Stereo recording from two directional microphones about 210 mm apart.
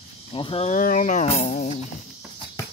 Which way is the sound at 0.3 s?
25° left (ahead or behind).